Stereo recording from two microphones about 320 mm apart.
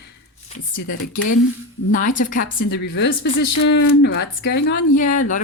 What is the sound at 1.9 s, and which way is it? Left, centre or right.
Speech, left.